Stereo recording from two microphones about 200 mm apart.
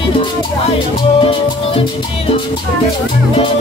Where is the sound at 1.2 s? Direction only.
25° left (ahead or behind).